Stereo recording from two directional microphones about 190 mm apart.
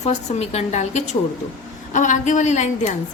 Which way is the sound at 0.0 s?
35° left (ahead or behind).